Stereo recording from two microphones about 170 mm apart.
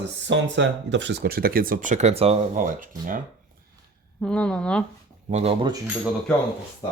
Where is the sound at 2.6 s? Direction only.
50° right (ahead or behind).